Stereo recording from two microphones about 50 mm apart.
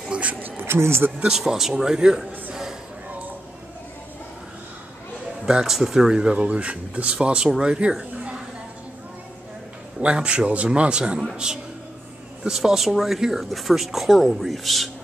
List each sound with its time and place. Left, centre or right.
0.1 s speech: right
0.7 s speech: right
1.3 s speech: centre
5.4 s speech: centre
9.9 s speech: centre